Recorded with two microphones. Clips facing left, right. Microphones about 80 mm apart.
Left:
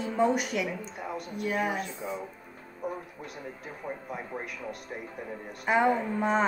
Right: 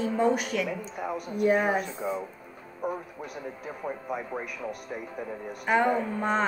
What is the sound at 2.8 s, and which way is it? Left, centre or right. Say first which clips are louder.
Music: right 3 dB; right.